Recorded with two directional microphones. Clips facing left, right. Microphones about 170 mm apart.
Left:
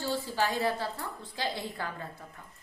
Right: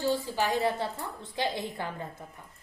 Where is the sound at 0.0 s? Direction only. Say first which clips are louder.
Right 2 dB; 15° right (ahead or behind).